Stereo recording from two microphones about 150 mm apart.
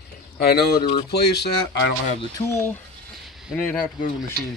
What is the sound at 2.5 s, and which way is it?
Speech, 15° left (ahead or behind).